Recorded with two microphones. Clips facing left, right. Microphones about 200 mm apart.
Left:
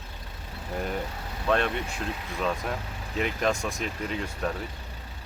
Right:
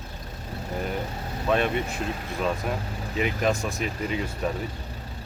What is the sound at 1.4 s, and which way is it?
Speech, 5° right (ahead or behind).